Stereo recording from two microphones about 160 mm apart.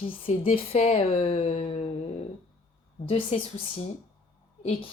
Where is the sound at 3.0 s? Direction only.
35° left (ahead or behind).